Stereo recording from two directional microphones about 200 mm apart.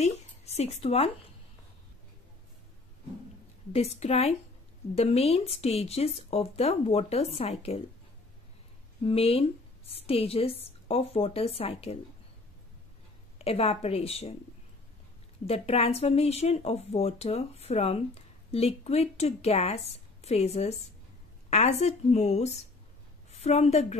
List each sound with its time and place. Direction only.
0.0 s speech: 30° left (ahead or behind)
3.7 s speech: 30° left (ahead or behind)
9.0 s a woman's voice: 30° left (ahead or behind)
13.4 s a woman's voice: 30° left (ahead or behind)
15.4 s a woman's voice: 30° left (ahead or behind)